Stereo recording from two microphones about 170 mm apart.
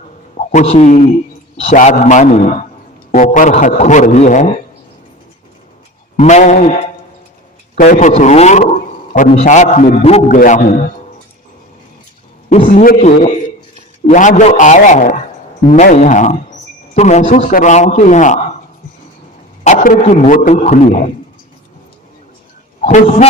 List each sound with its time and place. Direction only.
0.3 s a man's voice: 40° left (ahead or behind)
6.1 s a man's voice: 45° left (ahead or behind)
7.8 s a man's voice: 50° left (ahead or behind)
10.3 s a man's voice: 50° left (ahead or behind)
12.6 s a man's voice: 55° left (ahead or behind)
13.0 s a man's voice: 40° left (ahead or behind)
19.6 s a man's voice: 45° left (ahead or behind)
22.8 s a man's voice: 40° left (ahead or behind)